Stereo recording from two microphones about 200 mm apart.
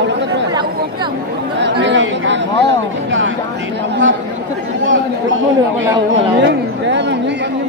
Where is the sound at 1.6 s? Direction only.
65° right (ahead or behind).